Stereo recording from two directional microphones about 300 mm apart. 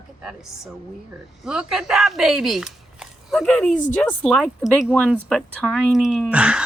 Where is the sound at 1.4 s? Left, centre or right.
Centre.